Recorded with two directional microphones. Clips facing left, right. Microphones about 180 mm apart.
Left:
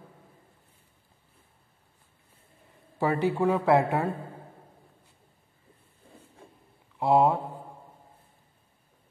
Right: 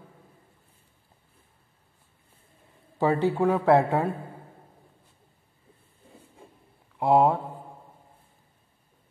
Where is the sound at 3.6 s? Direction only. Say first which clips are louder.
Right 3 dB; 15° left (ahead or behind).